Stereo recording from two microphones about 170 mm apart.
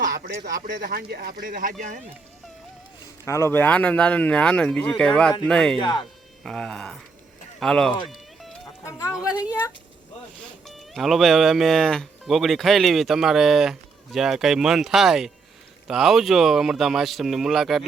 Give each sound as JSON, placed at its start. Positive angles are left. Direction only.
{"t": 0.3, "sound": "speech", "side_deg": -60}
{"t": 3.2, "sound": "speech", "side_deg": 15}
{"t": 5.8, "sound": "a woman's voice", "side_deg": 25}
{"t": 6.4, "sound": "speech", "side_deg": 5}
{"t": 8.8, "sound": "a woman's voice", "side_deg": 15}
{"t": 10.7, "sound": "speech", "side_deg": 0}